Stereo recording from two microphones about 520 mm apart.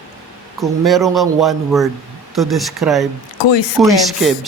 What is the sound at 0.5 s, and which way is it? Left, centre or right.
Speech, centre.